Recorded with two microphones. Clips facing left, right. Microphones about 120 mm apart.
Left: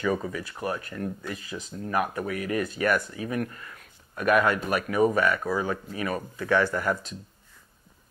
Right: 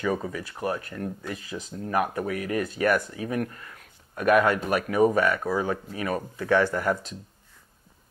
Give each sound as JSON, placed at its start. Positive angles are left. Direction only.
{"t": 0.0, "sound": "speech", "side_deg": -35}
{"t": 1.6, "sound": "speech", "side_deg": -20}
{"t": 2.0, "sound": "speech", "side_deg": -35}